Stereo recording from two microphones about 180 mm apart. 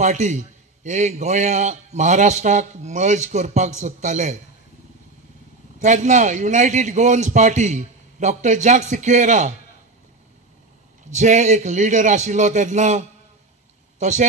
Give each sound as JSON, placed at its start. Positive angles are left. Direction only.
{"t": 0.0, "sound": "a man's voice", "side_deg": -40}
{"t": 5.8, "sound": "a man's voice", "side_deg": -40}
{"t": 11.1, "sound": "a man's voice", "side_deg": -40}